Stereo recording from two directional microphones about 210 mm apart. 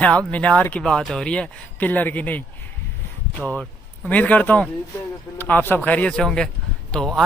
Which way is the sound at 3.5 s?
5° left (ahead or behind).